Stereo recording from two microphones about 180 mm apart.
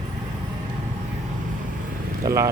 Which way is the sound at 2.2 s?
15° right (ahead or behind).